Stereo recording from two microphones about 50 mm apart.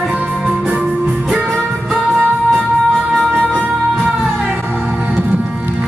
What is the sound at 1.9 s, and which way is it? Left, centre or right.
Music, centre.